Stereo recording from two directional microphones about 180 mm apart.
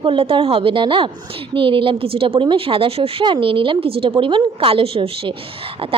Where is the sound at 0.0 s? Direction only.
30° right (ahead or behind).